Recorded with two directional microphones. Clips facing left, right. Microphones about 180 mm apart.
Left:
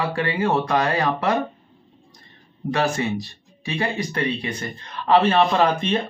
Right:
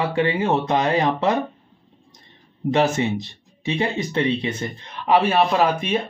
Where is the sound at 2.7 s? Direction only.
20° right (ahead or behind).